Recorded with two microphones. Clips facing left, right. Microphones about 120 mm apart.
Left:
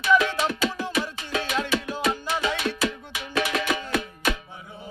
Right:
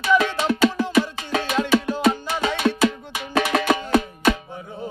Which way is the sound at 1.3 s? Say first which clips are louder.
Right 4 dB; 40° right (ahead or behind).